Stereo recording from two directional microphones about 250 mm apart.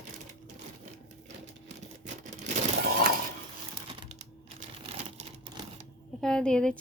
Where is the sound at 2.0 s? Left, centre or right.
Right.